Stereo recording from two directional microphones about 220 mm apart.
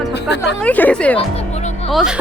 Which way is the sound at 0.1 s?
50° left (ahead or behind).